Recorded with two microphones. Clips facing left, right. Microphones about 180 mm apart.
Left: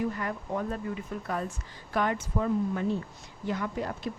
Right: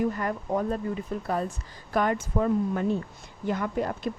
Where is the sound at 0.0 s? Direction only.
45° right (ahead or behind).